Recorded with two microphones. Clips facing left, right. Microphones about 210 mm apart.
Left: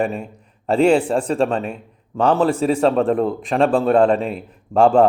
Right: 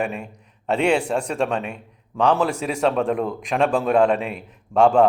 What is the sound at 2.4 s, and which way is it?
Speech, 35° left (ahead or behind).